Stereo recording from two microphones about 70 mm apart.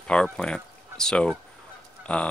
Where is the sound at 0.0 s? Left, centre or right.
Centre.